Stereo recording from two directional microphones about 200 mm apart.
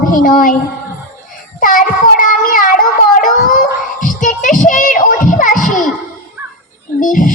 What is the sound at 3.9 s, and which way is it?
Child singing, 40° left (ahead or behind).